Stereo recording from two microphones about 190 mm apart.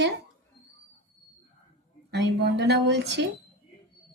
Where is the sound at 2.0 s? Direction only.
65° right (ahead or behind).